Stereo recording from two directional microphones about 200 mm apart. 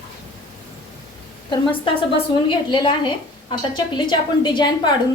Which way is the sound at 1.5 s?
25° left (ahead or behind).